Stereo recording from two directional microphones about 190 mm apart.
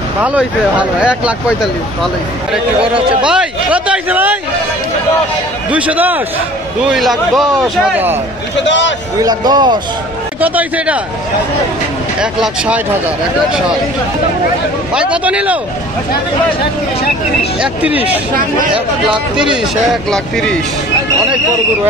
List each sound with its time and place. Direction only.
0.2 s speech: 5° right (ahead or behind)
3.3 s speech: 5° right (ahead or behind)
5.7 s a man's voice: 5° right (ahead or behind)
8.6 s a man's voice: 70° left (ahead or behind)
9.2 s speech: 20° right (ahead or behind)
10.4 s speech: 10° right (ahead or behind)
12.2 s a man's voice: 5° right (ahead or behind)
15.0 s speech: 5° right (ahead or behind)
17.6 s a man's voice: 5° right (ahead or behind)